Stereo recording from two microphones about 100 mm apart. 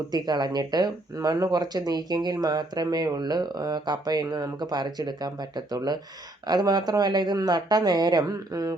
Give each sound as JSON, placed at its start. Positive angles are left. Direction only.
{"t": 0.1, "sound": "speech", "side_deg": -40}